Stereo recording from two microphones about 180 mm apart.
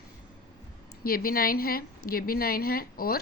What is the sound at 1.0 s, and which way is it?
A woman's voice, 55° left (ahead or behind).